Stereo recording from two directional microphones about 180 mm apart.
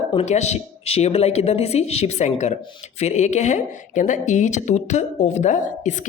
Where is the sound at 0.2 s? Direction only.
40° left (ahead or behind).